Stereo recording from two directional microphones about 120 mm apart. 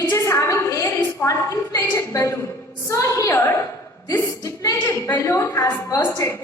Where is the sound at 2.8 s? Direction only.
25° left (ahead or behind).